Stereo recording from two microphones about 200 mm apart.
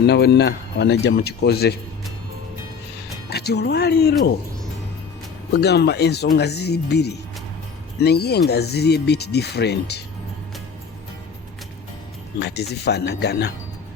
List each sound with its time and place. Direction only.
0.1 s speech: 55° left (ahead or behind)
3.2 s speech: 55° left (ahead or behind)
5.5 s speech: 55° left (ahead or behind)
12.4 s speech: 55° left (ahead or behind)